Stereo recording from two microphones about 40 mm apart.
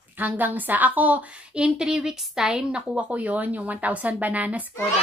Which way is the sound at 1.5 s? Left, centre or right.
Right.